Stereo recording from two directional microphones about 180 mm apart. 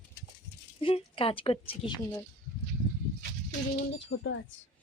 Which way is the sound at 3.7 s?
90° left.